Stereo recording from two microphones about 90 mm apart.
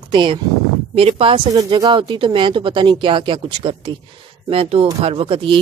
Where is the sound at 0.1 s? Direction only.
70° right (ahead or behind).